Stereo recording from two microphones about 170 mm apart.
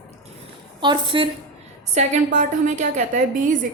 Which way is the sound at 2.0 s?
45° right (ahead or behind).